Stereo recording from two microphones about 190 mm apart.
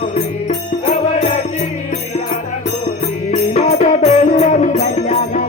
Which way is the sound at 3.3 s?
35° left (ahead or behind).